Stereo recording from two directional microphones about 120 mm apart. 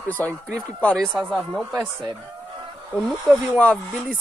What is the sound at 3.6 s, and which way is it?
Speech, 10° left (ahead or behind).